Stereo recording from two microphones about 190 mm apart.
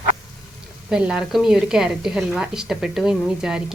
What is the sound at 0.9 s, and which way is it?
A woman's voice, 5° right (ahead or behind).